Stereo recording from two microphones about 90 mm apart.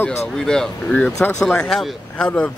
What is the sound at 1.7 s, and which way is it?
Speech, 10° left (ahead or behind).